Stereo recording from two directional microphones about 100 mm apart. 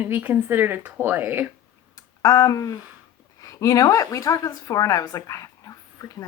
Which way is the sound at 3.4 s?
35° left (ahead or behind).